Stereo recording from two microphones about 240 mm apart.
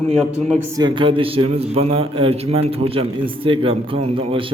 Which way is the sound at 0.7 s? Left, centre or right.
Centre.